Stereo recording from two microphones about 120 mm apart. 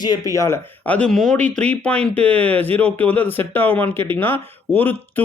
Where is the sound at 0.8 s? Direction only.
10° left (ahead or behind).